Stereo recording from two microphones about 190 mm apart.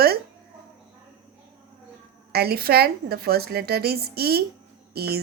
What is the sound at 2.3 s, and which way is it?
A woman's voice, 55° right (ahead or behind).